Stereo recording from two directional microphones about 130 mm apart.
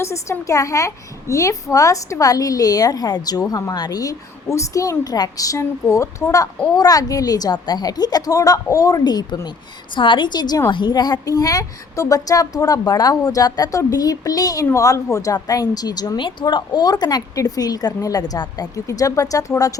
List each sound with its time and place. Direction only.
0.0 s a woman's voice: 20° left (ahead or behind)